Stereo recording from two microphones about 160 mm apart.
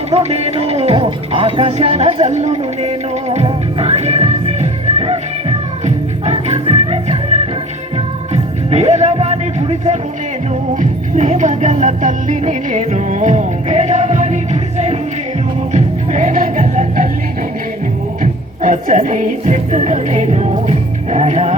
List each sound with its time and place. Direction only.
0.1 s speech: 40° right (ahead or behind)
7.9 s music: 45° right (ahead or behind)
18.2 s speech: 55° right (ahead or behind)